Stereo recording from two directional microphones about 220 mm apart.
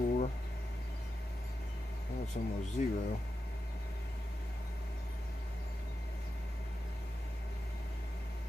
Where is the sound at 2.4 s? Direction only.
35° left (ahead or behind).